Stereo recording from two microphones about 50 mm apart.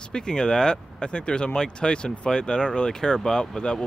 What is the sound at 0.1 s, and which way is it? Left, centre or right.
Speech, centre.